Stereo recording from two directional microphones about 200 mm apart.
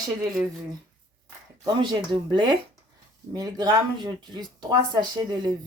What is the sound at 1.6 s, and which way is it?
Speech, 25° right (ahead or behind).